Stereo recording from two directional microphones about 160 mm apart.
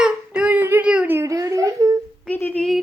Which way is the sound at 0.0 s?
5° right (ahead or behind).